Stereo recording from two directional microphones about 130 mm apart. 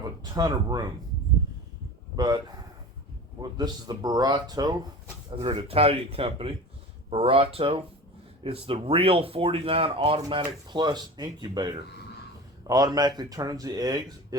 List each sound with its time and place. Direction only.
0.3 s speech: 30° right (ahead or behind)
2.1 s speech: 30° right (ahead or behind)
3.6 s speech: 30° right (ahead or behind)
5.4 s speech: 45° right (ahead or behind)
10.7 s speech: 35° right (ahead or behind)